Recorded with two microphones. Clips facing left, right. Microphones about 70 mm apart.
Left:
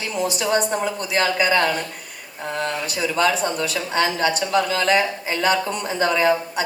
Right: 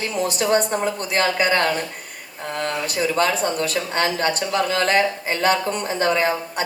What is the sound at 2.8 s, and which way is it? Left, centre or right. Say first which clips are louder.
Speech: even; right.